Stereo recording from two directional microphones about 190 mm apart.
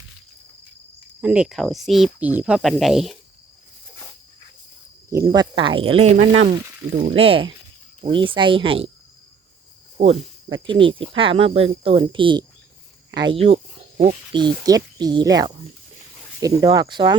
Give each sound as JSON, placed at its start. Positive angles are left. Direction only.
{"t": 1.2, "sound": "speech", "side_deg": -5}
{"t": 5.1, "sound": "speech", "side_deg": -20}
{"t": 10.5, "sound": "speech", "side_deg": -25}